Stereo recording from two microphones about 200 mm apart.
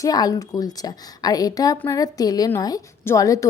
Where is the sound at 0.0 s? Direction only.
20° left (ahead or behind).